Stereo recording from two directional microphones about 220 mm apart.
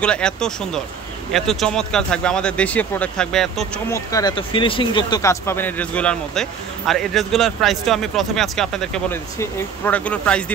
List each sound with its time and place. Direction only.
0.0 s a man's voice: 5° left (ahead or behind)
3.9 s a man's voice: 15° left (ahead or behind)